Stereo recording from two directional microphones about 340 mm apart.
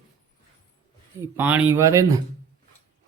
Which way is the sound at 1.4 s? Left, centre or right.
Centre.